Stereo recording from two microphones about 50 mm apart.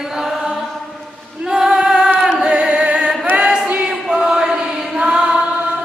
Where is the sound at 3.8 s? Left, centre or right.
Centre.